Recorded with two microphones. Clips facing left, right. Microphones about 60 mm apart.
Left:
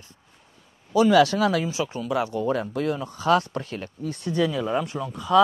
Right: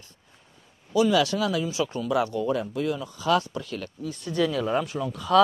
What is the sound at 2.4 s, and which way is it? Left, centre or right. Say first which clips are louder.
Speech: left 1 dB; left.